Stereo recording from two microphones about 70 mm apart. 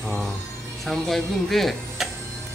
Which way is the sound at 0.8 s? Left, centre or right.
Centre.